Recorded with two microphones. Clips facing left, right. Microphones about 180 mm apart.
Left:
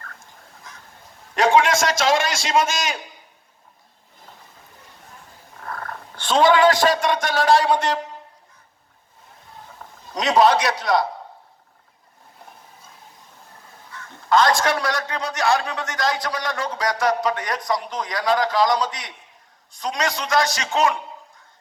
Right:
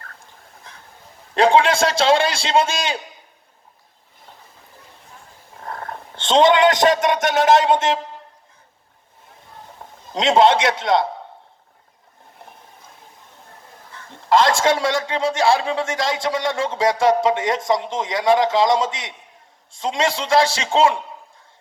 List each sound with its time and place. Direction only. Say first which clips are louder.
0.7 s a sound: even; 30° right (ahead or behind)
1.4 s a man's voice: right 2 dB; 30° right (ahead or behind)
5.6 s speech: right 2 dB; 25° right (ahead or behind)
9.7 s a man's voice: right 3 dB; 25° right (ahead or behind)
13.9 s a man's voice: right 2 dB; 30° right (ahead or behind)